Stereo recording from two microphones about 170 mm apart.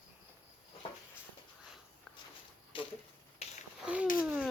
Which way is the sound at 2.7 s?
30° left (ahead or behind).